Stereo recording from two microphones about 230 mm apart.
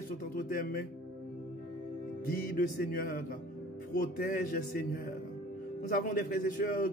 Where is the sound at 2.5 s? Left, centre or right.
Left.